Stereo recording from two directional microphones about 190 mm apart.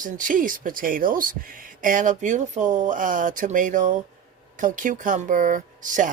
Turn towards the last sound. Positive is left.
turn(degrees=-40)  # may be behind; listen again after turning